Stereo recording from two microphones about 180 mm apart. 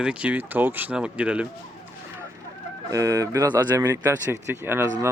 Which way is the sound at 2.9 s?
20° right (ahead or behind).